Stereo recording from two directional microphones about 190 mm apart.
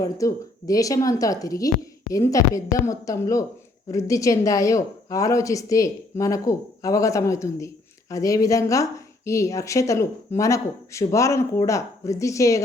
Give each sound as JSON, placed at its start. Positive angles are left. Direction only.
{"t": 0.0, "sound": "a woman's voice", "side_deg": 15}